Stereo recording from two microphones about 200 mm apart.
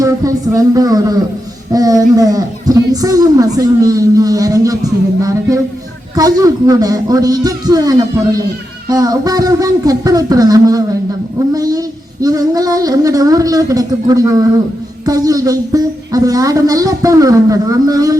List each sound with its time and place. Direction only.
0.0 s a woman's voice: 15° right (ahead or behind)